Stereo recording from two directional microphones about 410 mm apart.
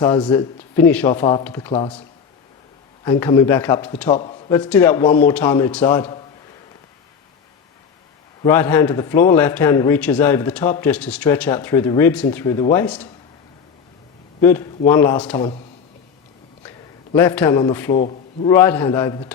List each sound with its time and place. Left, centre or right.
0.0 s speech: centre
8.4 s a man's voice: centre
14.4 s a man's voice: centre
16.6 s a man's voice: centre
18.0 s a man's voice: centre
18.5 s speech: centre